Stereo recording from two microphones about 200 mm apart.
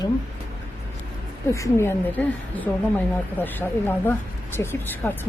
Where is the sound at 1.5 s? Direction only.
15° left (ahead or behind).